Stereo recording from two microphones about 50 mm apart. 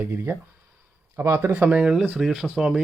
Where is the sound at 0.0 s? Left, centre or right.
Right.